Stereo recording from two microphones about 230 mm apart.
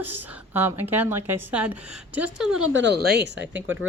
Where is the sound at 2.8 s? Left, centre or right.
Right.